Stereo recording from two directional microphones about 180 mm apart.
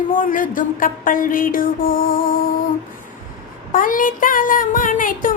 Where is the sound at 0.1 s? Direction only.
50° left (ahead or behind).